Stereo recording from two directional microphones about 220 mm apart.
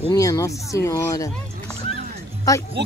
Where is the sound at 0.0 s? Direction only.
15° left (ahead or behind).